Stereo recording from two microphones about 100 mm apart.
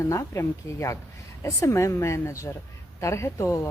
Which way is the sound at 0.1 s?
30° left (ahead or behind).